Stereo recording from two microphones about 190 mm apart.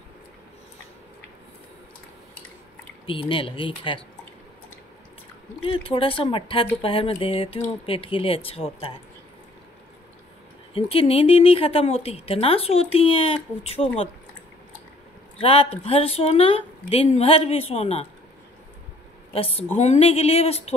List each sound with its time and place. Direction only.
3.1 s speech: 25° left (ahead or behind)
5.7 s speech: 30° left (ahead or behind)
10.7 s speech: 30° left (ahead or behind)
15.3 s speech: 30° left (ahead or behind)
19.3 s speech: 30° left (ahead or behind)